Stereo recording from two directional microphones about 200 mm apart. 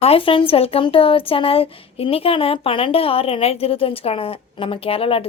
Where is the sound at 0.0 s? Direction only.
30° left (ahead or behind).